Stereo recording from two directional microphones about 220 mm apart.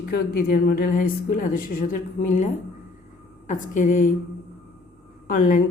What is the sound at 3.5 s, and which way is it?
Speech, 35° left (ahead or behind).